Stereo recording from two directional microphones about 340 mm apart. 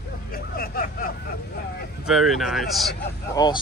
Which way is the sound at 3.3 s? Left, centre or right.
Centre.